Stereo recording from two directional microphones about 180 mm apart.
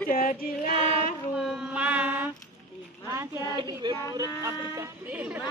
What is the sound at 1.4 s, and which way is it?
Speech, 5° right (ahead or behind).